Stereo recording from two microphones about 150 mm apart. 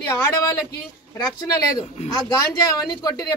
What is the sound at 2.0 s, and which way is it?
Speech, 50° left (ahead or behind).